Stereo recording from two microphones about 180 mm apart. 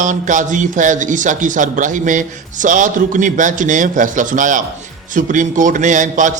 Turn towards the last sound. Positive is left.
turn(degrees=-45)  # may be behind; listen again after turning